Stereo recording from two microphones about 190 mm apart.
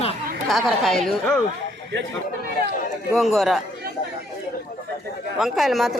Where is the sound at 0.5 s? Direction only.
Centre (ahead or behind).